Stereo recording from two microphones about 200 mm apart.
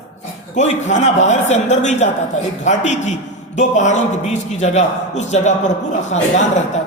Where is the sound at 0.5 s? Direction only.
35° left (ahead or behind).